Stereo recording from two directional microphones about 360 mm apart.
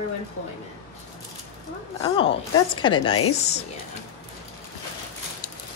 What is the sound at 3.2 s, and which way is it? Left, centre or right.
Speech, left.